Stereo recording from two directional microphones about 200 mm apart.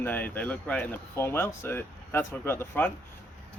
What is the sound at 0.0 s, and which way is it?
Speech, 10° left (ahead or behind).